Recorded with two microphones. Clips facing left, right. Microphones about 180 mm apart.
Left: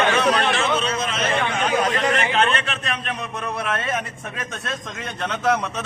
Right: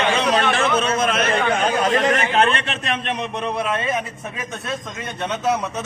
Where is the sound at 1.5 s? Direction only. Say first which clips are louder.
Right 3 dB; 35° right (ahead or behind).